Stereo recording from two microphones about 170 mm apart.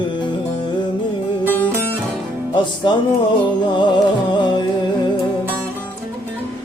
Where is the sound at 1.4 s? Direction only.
10° left (ahead or behind).